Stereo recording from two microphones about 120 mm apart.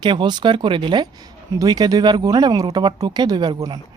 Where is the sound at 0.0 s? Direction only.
40° right (ahead or behind).